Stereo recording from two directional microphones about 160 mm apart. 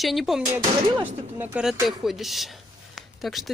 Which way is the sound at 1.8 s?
Centre (ahead or behind).